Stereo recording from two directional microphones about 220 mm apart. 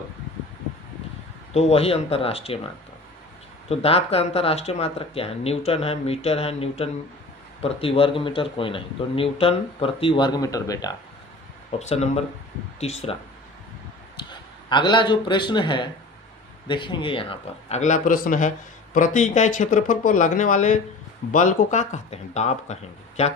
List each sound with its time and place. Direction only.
1.5 s speech: 30° left (ahead or behind)
3.7 s speech: 25° left (ahead or behind)
11.8 s speech: 30° left (ahead or behind)
14.3 s speech: 20° left (ahead or behind)